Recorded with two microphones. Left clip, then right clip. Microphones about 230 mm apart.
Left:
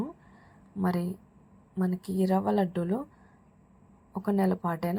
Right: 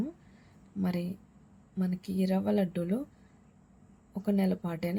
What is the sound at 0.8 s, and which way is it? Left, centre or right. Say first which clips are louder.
Speech: left 4 dB; centre.